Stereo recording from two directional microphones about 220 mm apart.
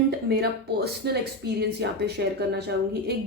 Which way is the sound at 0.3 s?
45° right (ahead or behind).